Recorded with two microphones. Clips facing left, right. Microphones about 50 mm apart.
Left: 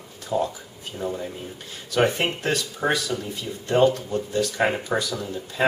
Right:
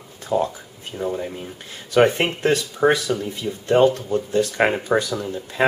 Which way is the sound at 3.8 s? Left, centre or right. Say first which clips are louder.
Right 2 dB; right.